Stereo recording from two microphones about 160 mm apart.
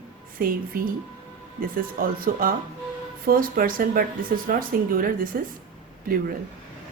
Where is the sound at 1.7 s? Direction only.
65° right (ahead or behind).